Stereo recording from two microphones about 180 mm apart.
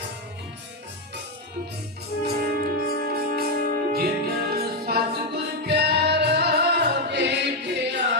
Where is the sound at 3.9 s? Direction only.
60° right (ahead or behind); by 8.1 s 75° right (ahead or behind).